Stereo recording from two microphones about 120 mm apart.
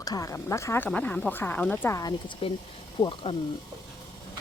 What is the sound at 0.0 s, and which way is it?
Speech, 30° left (ahead or behind).